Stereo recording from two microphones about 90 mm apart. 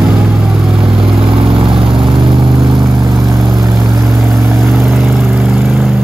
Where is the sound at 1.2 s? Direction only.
90° right.